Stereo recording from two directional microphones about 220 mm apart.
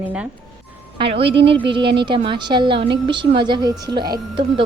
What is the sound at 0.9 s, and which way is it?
A woman's voice, 25° right (ahead or behind).